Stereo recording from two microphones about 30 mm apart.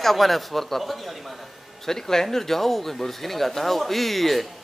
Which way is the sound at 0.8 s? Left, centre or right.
Centre.